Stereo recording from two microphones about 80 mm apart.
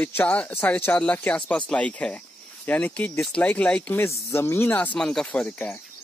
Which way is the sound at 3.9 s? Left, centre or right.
Left.